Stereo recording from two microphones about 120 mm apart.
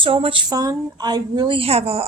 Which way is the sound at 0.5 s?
30° right (ahead or behind).